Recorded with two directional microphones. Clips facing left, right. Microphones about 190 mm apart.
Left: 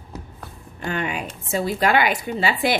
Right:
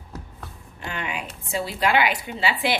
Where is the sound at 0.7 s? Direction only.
45° left (ahead or behind).